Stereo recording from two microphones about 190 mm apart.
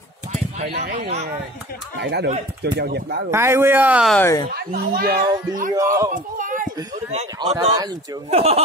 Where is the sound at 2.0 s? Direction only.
60° right (ahead or behind).